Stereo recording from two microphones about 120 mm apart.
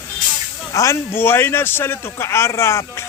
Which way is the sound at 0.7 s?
25° left (ahead or behind).